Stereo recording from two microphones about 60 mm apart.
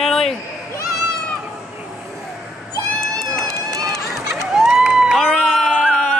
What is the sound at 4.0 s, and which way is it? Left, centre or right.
Run, centre.